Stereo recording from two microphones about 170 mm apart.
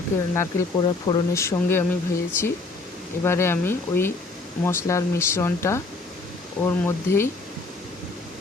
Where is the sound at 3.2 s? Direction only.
15° left (ahead or behind).